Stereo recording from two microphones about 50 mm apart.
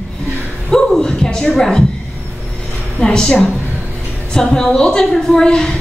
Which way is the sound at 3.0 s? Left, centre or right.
Centre.